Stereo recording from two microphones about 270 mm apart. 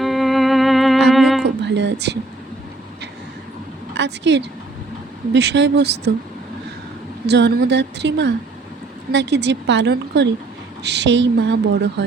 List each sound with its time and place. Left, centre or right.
0.0 s music: centre
1.6 s a woman's voice: right
3.9 s speech: right
7.3 s speech: right